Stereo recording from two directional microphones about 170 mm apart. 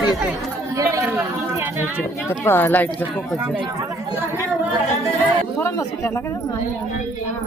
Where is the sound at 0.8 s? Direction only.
15° right (ahead or behind).